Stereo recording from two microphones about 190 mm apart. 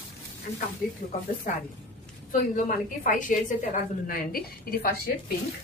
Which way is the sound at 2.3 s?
45° left (ahead or behind).